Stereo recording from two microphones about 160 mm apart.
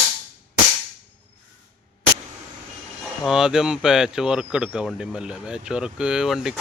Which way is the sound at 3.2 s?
5° right (ahead or behind).